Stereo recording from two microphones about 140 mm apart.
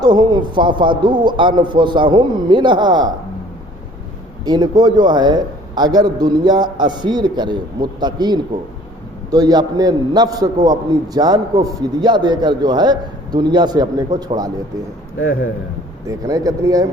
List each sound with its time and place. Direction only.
0.0 s a man's voice: 30° right (ahead or behind)
4.4 s a man's voice: 30° right (ahead or behind)
16.0 s a man's voice: 25° right (ahead or behind)